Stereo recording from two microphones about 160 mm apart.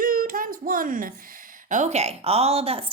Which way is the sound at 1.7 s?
45° right (ahead or behind).